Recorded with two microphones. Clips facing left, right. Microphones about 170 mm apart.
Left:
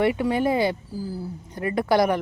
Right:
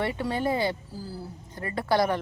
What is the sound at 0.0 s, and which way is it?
Speech, 15° left (ahead or behind).